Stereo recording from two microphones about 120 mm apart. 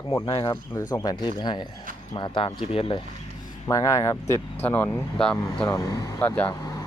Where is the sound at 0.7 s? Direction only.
25° left (ahead or behind); by 3.0 s 50° left (ahead or behind).